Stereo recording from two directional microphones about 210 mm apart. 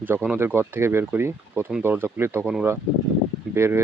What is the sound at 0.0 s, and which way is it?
Speech, 10° right (ahead or behind).